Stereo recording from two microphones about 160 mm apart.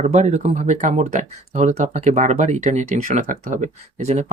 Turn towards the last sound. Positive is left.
turn(degrees=-45)  # may be behind; listen again after turning